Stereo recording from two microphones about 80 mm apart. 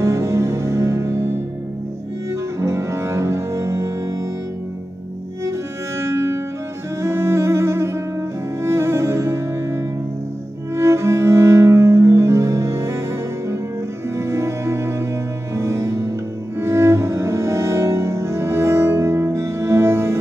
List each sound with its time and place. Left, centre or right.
0.0 s music: right
2.6 s cello: right
5.9 s music: right
10.7 s cello: right
14.1 s music: right
16.5 s cello: right